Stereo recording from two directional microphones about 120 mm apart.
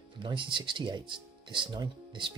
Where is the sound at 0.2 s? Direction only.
45° right (ahead or behind).